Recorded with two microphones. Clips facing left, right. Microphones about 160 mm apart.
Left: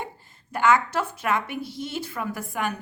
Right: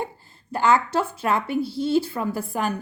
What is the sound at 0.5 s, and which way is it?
A woman's voice, 30° right (ahead or behind).